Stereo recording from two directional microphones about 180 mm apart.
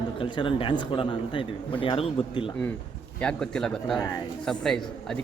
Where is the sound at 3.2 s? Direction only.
5° left (ahead or behind).